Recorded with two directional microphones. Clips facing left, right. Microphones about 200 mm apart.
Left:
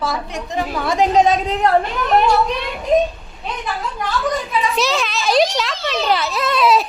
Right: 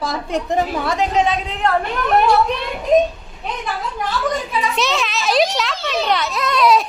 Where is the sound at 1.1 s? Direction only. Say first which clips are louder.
Left 4 dB; 40° left (ahead or behind).